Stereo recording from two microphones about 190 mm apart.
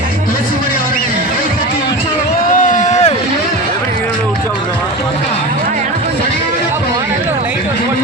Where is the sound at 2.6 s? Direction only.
40° left (ahead or behind).